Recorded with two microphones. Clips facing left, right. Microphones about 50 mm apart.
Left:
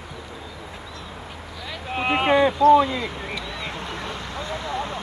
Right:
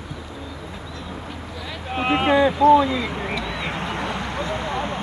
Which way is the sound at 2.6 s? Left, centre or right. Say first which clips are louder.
Even; centre.